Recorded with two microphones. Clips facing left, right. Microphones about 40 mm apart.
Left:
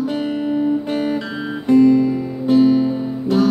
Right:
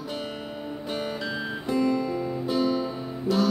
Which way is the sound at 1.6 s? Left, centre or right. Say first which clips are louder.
Left 13 dB; left.